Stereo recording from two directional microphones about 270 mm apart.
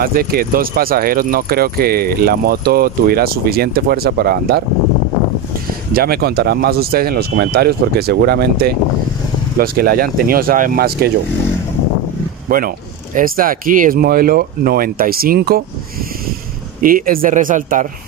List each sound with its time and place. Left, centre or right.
0.0 s speech: right
5.9 s speech: right
12.4 s speech: right
16.8 s speech: right